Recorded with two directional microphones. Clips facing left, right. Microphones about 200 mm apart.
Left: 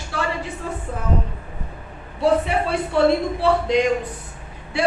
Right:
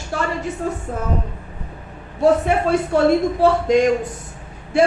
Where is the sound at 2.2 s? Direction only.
45° right (ahead or behind).